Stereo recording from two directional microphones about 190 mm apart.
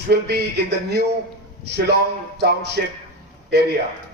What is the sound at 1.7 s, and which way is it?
A man's voice, 60° right (ahead or behind).